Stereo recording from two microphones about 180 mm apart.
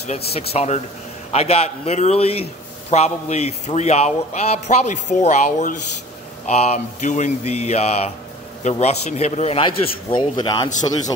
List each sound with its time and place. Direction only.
0.3 s speech: 35° left (ahead or behind)